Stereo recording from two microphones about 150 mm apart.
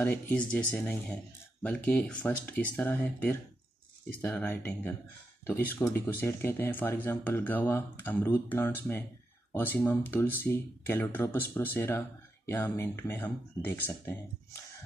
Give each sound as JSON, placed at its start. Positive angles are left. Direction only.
{"t": 0.0, "sound": "speech", "side_deg": 10}